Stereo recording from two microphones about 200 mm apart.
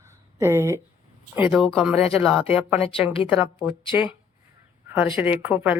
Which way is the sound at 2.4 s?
30° left (ahead or behind).